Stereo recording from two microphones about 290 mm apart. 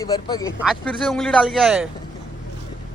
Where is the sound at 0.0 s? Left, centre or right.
Centre.